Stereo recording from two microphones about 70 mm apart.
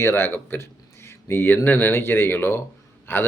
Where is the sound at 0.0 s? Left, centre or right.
Left.